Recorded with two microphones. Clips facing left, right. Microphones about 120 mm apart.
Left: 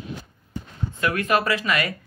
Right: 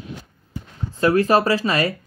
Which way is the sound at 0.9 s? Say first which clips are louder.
Right 6 dB; 35° right (ahead or behind).